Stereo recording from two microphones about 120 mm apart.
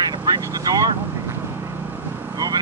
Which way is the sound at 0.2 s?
35° right (ahead or behind).